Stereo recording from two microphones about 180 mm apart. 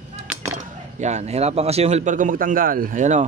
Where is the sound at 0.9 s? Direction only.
40° right (ahead or behind).